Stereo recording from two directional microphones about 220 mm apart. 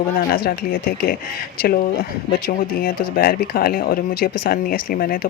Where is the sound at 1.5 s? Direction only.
45° left (ahead or behind).